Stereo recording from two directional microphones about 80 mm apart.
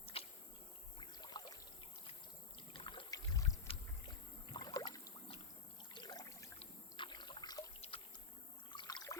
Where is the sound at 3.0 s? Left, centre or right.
Left.